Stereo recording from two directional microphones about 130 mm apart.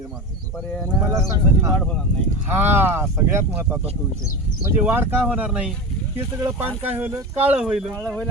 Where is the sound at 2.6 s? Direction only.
15° right (ahead or behind).